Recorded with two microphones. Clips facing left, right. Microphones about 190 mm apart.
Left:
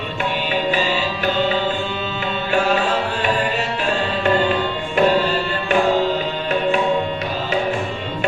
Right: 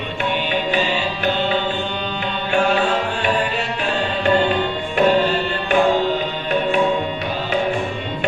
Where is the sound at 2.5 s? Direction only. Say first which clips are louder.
Right 1 dB; 40° left (ahead or behind).